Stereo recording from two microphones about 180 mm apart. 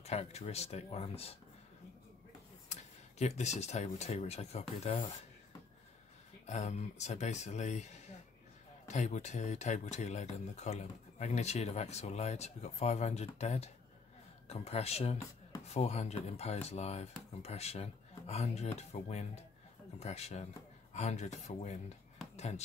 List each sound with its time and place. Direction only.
0.0 s speech: 35° left (ahead or behind)
2.7 s speech: 40° left (ahead or behind)
6.4 s speech: 40° left (ahead or behind)